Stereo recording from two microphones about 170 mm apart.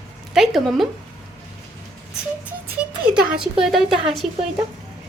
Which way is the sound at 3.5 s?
Centre (ahead or behind).